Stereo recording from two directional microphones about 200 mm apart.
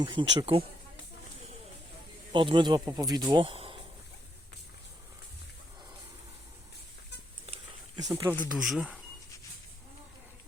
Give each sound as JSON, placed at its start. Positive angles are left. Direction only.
{"t": 0.0, "sound": "speech", "side_deg": -20}
{"t": 2.3, "sound": "speech", "side_deg": -25}
{"t": 7.9, "sound": "speech", "side_deg": -15}